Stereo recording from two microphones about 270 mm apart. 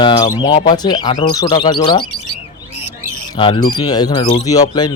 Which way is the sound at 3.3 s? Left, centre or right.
Centre.